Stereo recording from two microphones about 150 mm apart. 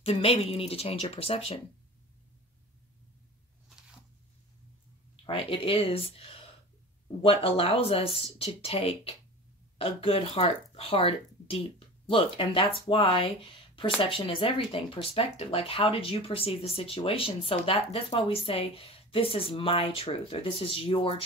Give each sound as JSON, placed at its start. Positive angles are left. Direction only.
{"t": 0.0, "sound": "speech", "side_deg": 40}
{"t": 5.2, "sound": "speech", "side_deg": 35}